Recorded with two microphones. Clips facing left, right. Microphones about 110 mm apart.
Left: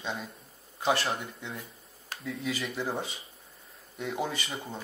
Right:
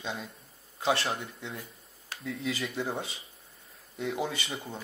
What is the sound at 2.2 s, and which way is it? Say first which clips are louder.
Speech: even; 25° left (ahead or behind).